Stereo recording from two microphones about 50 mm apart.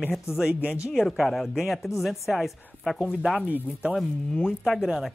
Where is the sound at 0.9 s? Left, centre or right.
Centre.